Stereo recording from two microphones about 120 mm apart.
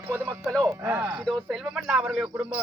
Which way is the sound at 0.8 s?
20° right (ahead or behind).